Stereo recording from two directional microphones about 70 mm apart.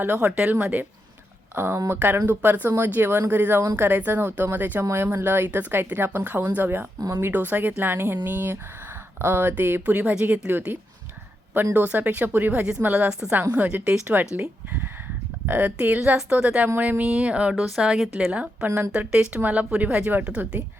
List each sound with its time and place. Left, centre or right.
0.0 s speech: right
0.3 s speech: centre
4.8 s speech: right
15.4 s a woman's voice: right
17.7 s a woman's voice: centre